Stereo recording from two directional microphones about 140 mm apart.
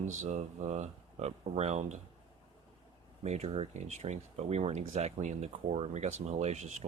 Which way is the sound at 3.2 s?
50° right (ahead or behind).